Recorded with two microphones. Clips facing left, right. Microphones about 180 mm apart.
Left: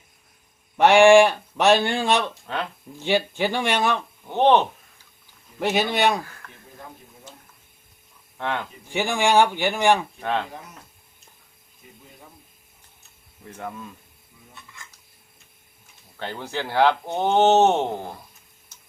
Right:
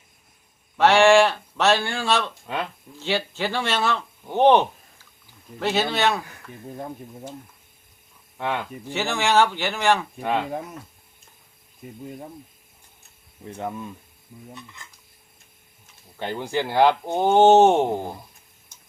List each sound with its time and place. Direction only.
0.8 s speech: 15° left (ahead or behind)
4.3 s speech: 10° right (ahead or behind)
5.5 s speech: 15° left (ahead or behind)
6.4 s speech: 10° right (ahead or behind)
8.4 s speech: 10° right (ahead or behind)
8.9 s speech: 15° left (ahead or behind)
10.2 s speech: 10° right (ahead or behind)
13.4 s speech: 20° right (ahead or behind)
16.1 s speech: 15° right (ahead or behind)